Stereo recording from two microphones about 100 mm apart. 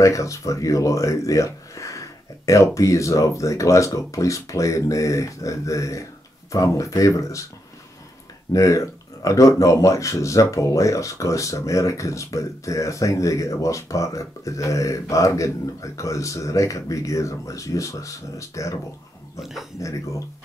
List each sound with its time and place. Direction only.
0.0 s speech: 30° left (ahead or behind)
8.5 s speech: 30° left (ahead or behind)
19.8 s speech: 30° left (ahead or behind)